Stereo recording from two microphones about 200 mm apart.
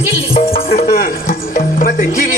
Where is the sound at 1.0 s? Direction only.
45° left (ahead or behind).